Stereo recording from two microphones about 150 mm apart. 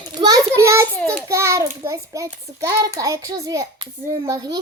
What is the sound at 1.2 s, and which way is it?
A child's voice, 20° right (ahead or behind).